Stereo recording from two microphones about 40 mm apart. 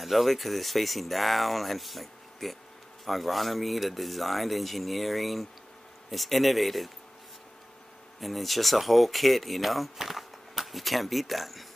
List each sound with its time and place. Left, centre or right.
0.0 s speech: centre
8.2 s speech: centre